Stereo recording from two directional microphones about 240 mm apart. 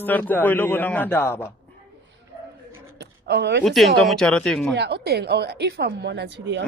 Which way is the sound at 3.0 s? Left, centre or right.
Right.